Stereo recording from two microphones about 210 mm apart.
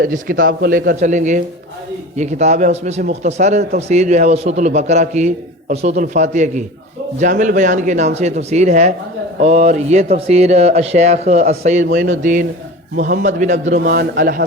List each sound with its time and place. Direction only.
0.0 s speech: 40° right (ahead or behind)
13.8 s a man's voice: 50° right (ahead or behind)